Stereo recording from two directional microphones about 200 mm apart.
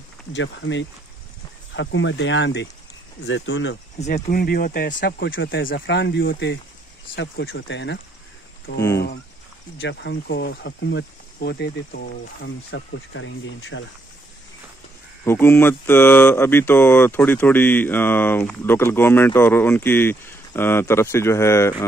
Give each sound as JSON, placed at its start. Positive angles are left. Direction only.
{"t": 0.3, "sound": "speech", "side_deg": 65}
{"t": 4.1, "sound": "speech", "side_deg": 50}
{"t": 5.8, "sound": "speech", "side_deg": 60}
{"t": 9.8, "sound": "speech", "side_deg": 65}
{"t": 15.2, "sound": "speech", "side_deg": 10}